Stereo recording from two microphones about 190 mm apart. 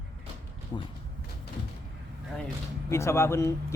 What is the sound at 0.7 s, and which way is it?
Speech, 25° left (ahead or behind).